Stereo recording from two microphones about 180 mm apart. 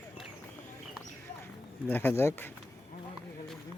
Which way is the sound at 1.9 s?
10° left (ahead or behind).